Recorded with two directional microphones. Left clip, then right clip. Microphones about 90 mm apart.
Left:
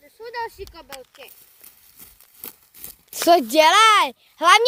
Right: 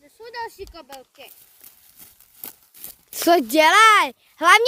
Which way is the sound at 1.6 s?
25° right (ahead or behind).